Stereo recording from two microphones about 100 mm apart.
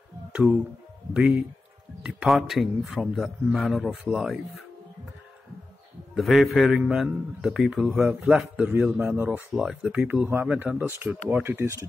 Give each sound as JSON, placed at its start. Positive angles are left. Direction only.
{"t": 0.3, "sound": "music", "side_deg": -10}
{"t": 1.1, "sound": "a man's voice", "side_deg": -10}
{"t": 6.1, "sound": "a man's voice", "side_deg": 0}